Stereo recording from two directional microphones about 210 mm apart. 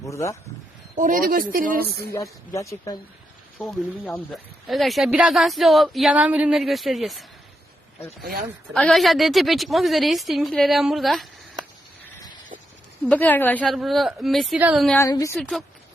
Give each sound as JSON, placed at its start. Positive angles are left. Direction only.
{"t": 0.0, "sound": "speech", "side_deg": 15}
{"t": 0.9, "sound": "speech", "side_deg": -40}
{"t": 2.5, "sound": "a woman's voice", "side_deg": 15}
{"t": 3.6, "sound": "speech", "side_deg": 5}
{"t": 8.2, "sound": "speech", "side_deg": -45}
{"t": 8.7, "sound": "speech", "side_deg": 0}
{"t": 13.1, "sound": "speech", "side_deg": 10}
{"t": 14.8, "sound": "a woman's voice", "side_deg": 15}
{"t": 15.4, "sound": "speech", "side_deg": 5}